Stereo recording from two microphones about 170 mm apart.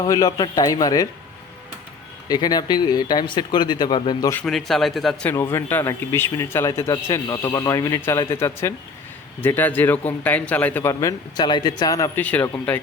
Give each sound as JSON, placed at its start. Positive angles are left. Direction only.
{"t": 0.0, "sound": "speech", "side_deg": 20}
{"t": 2.3, "sound": "speech", "side_deg": 25}
{"t": 4.4, "sound": "speech", "side_deg": 0}
{"t": 5.3, "sound": "a man's voice", "side_deg": 15}
{"t": 12.2, "sound": "a man's voice", "side_deg": 10}